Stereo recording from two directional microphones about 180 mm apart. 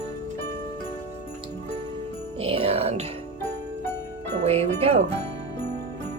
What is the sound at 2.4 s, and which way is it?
Speech, 35° right (ahead or behind).